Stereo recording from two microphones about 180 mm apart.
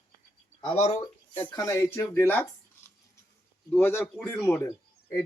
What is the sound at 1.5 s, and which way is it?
Speech, 20° left (ahead or behind).